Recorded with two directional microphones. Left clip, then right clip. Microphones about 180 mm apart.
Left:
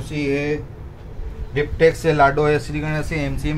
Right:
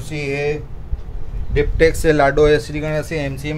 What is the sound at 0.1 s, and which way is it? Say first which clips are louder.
Speech: left 1 dB; 55° right (ahead or behind).